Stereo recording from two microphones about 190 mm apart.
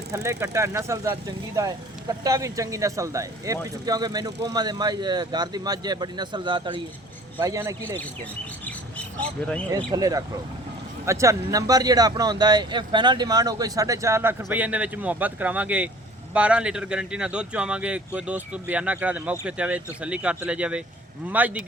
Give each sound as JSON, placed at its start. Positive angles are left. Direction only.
{"t": 0.1, "sound": "speech", "side_deg": -15}
{"t": 9.7, "sound": "speech", "side_deg": -20}